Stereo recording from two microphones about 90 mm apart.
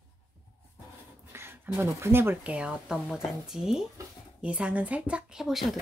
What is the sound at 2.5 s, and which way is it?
Speech, 10° right (ahead or behind).